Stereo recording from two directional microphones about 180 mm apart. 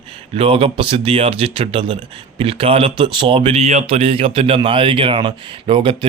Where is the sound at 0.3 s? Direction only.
30° right (ahead or behind).